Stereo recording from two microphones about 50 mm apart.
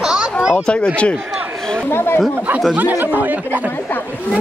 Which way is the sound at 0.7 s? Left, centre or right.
Left.